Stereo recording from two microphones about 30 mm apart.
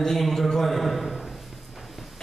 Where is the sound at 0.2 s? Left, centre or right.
Centre.